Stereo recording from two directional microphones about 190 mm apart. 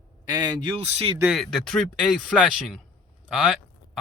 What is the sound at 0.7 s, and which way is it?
Speech, 30° right (ahead or behind).